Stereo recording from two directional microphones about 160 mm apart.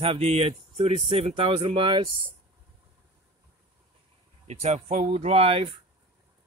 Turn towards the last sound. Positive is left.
turn(degrees=-40)  # may be behind; listen again after turning